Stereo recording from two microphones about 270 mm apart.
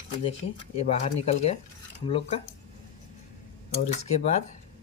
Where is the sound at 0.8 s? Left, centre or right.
Left.